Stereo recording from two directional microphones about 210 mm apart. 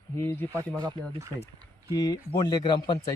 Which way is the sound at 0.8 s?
20° right (ahead or behind).